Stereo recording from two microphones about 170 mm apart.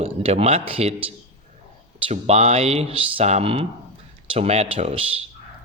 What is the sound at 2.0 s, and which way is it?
Speech, 35° right (ahead or behind).